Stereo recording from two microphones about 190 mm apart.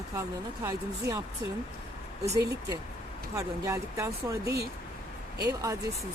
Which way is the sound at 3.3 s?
15° right (ahead or behind).